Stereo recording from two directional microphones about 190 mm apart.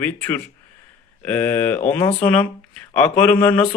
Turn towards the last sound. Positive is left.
turn(degrees=10)  # may be behind; listen again after turning